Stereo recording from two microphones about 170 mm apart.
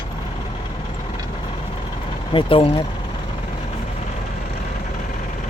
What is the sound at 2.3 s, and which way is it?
Speech, 30° left (ahead or behind).